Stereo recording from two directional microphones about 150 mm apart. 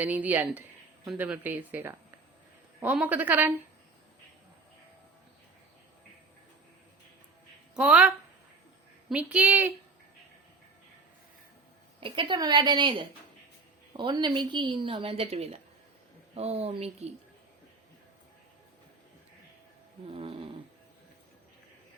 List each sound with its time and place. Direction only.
0.0 s speech: 10° right (ahead or behind)
7.8 s speech: 5° right (ahead or behind)
11.9 s a woman's voice: 35° right (ahead or behind)
20.1 s snoring: 35° right (ahead or behind)